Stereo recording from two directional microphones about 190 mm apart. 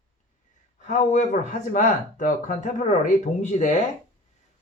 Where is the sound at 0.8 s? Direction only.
40° left (ahead or behind).